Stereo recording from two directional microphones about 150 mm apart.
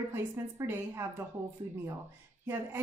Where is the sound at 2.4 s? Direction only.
15° right (ahead or behind).